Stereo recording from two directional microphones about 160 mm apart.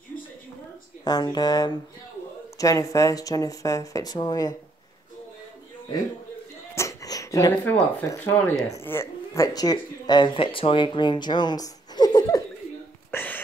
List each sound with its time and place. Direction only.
1.0 s speech: 25° left (ahead or behind)
6.7 s speech: 20° left (ahead or behind)
13.1 s a sound: 10° left (ahead or behind)